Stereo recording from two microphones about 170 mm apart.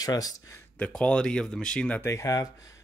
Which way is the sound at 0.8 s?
5° left (ahead or behind).